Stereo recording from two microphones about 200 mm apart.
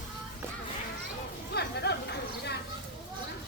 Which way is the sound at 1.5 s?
55° left (ahead or behind).